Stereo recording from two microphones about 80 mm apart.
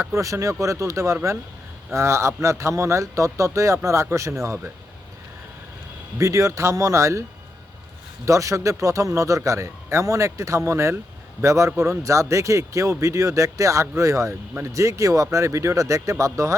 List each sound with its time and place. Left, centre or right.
0.0 s a man's voice: right
6.1 s a man's voice: right